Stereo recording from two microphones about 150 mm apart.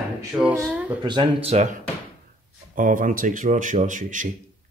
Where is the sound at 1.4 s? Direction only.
50° right (ahead or behind).